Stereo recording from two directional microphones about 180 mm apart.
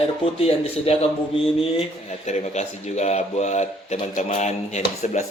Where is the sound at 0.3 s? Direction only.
35° left (ahead or behind).